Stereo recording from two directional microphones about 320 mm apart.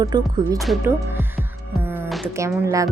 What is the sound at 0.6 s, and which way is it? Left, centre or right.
Music, centre.